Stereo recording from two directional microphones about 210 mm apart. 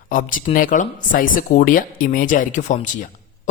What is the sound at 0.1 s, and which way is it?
Speech, 40° left (ahead or behind).